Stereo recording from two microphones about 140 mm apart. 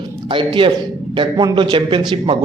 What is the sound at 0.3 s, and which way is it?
A man's voice, 35° right (ahead or behind).